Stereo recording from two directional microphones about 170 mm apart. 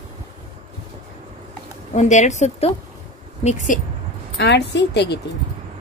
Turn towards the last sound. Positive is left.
turn(degrees=80)